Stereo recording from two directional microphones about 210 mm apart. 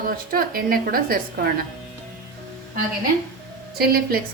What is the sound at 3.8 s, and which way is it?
Speech, 45° right (ahead or behind).